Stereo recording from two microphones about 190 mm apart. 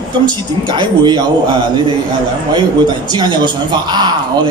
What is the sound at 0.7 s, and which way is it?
Speech, 25° right (ahead or behind).